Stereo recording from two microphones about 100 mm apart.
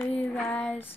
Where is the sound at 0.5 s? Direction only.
15° left (ahead or behind).